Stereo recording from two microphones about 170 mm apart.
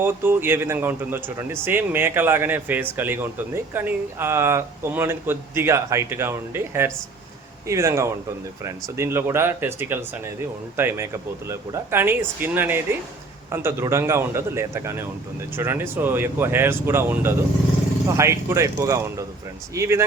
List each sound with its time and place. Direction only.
0.0 s speech: 15° right (ahead or behind)